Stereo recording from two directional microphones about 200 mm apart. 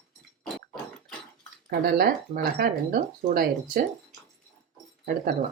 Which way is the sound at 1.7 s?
50° right (ahead or behind).